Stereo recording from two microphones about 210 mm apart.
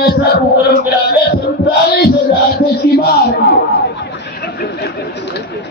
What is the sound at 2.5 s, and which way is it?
Speech, 50° left (ahead or behind).